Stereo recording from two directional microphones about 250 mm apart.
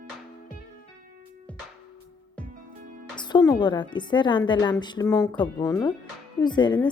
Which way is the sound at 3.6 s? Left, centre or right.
Centre.